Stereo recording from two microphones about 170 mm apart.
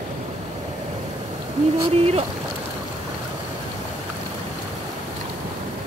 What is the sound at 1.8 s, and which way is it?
Speech, 35° right (ahead or behind).